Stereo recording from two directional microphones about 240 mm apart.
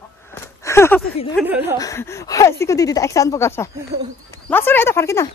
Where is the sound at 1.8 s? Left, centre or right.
Centre.